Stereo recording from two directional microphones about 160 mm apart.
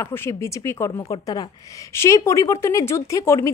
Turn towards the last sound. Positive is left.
turn(degrees=20)  # may be behind; listen again after turning